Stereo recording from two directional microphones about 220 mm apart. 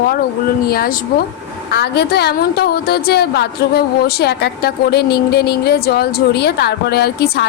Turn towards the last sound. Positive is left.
turn(degrees=45)  # may be behind; listen again after turning